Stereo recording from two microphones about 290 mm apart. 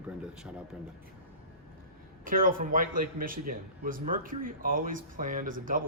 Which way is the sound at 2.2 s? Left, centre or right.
Right.